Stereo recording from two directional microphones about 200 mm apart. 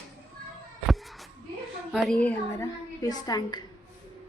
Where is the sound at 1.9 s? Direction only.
5° left (ahead or behind); by 3.6 s 20° left (ahead or behind).